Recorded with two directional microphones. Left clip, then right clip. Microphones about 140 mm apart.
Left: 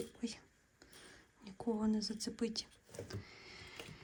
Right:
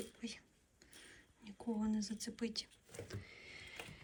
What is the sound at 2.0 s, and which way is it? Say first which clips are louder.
Speech: left 4 dB; 35° left (ahead or behind).